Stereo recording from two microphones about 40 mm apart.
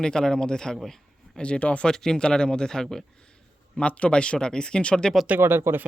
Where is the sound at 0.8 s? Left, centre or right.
Centre.